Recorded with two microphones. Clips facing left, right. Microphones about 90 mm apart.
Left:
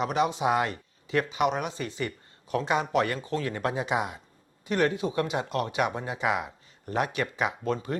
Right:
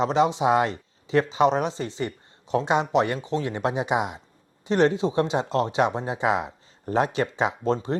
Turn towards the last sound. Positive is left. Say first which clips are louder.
# right 5 dB
turn(degrees=-25)  # may be behind; listen again after turning